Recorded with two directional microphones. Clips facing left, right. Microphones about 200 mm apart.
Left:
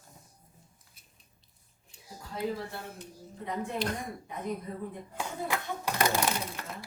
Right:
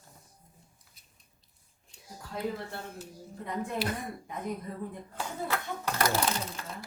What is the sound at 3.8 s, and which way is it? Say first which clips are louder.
Speech: even; 5° right (ahead or behind).